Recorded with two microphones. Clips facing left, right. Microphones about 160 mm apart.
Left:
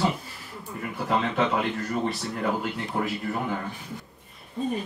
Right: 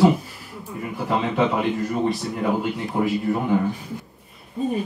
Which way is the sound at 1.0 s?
10° right (ahead or behind).